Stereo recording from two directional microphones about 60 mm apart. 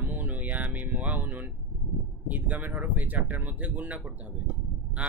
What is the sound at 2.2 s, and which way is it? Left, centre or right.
Speech, right.